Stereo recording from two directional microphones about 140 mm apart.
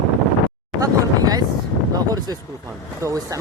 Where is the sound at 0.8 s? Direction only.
25° right (ahead or behind).